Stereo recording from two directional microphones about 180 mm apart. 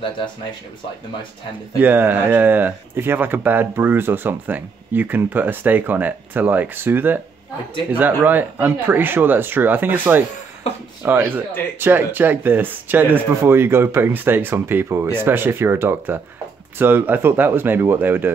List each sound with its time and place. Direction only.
1.8 s speech: 10° right (ahead or behind)